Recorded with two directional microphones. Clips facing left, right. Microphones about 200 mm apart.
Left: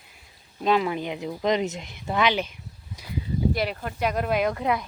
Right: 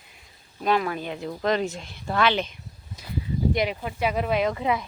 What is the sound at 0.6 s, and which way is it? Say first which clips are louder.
Speech: left 1 dB; 20° left (ahead or behind).